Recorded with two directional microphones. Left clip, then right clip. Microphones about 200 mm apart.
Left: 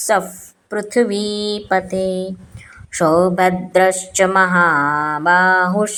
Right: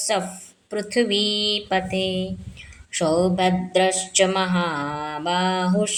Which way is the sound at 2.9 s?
20° left (ahead or behind).